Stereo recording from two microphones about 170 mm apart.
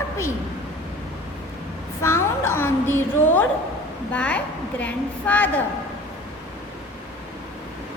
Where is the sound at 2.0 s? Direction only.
15° left (ahead or behind).